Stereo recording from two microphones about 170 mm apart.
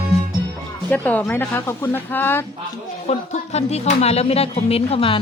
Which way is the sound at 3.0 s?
40° left (ahead or behind).